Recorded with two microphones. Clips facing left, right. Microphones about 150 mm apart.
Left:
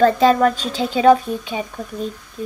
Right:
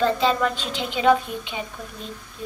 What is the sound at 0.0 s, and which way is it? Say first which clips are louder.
A woman's voice: left 7 dB; 45° left (ahead or behind).